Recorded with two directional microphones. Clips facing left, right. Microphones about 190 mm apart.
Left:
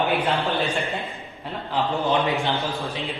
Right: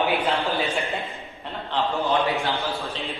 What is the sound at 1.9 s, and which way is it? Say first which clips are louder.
A man's voice: left 1 dB; 15° left (ahead or behind).